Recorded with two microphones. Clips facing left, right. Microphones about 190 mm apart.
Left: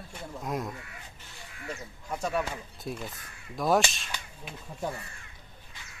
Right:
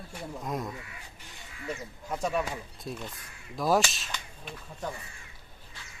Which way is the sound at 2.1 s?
15° right (ahead or behind).